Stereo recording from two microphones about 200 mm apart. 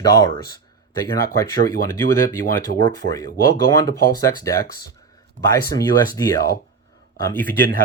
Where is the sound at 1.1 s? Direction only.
15° left (ahead or behind).